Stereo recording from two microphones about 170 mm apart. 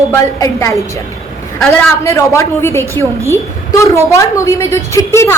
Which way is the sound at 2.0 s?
15° left (ahead or behind).